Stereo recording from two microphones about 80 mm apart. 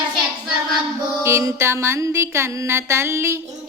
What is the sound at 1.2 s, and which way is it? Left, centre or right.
Music, right.